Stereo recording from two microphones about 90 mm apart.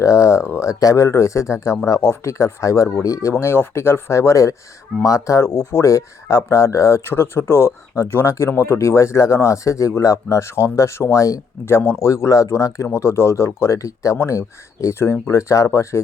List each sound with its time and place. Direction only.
0.0 s speech: 35° left (ahead or behind)
3.3 s speech: 25° left (ahead or behind)